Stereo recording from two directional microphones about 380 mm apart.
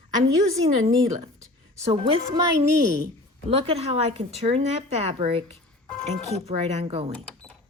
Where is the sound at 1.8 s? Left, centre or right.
Centre.